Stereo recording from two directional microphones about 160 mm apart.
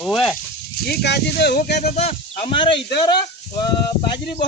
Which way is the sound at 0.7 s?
75° left (ahead or behind).